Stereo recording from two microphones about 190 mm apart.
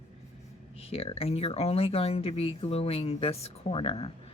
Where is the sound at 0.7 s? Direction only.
30° left (ahead or behind).